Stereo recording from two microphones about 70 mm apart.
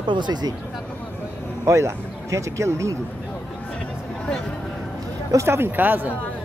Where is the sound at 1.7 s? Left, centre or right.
Right.